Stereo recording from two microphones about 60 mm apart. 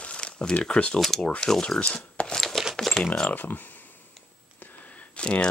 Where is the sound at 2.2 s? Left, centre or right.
Centre.